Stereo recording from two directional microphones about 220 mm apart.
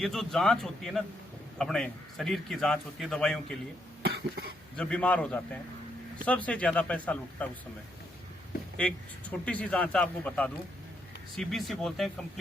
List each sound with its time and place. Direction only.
0.0 s a man's voice: centre (ahead or behind)
4.0 s cough: 45° right (ahead or behind)
4.8 s a man's voice: 5° left (ahead or behind)
9.3 s a man's voice: 5° left (ahead or behind)